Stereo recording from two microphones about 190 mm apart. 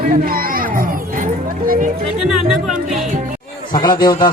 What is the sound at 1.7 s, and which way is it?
Music, 45° right (ahead or behind).